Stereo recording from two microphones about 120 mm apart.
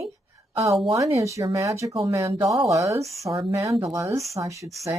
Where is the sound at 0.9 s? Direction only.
25° right (ahead or behind).